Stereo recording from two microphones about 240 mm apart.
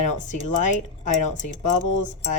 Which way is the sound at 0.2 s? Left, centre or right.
Left.